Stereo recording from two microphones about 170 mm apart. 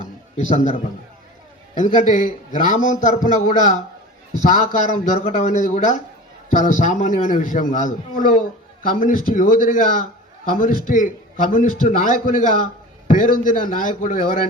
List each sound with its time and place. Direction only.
0.3 s a man's voice: 45° left (ahead or behind)
1.8 s a man's voice: 45° left (ahead or behind)